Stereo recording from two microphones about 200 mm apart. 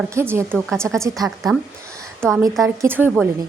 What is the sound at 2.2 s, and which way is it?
A woman's voice, 15° right (ahead or behind).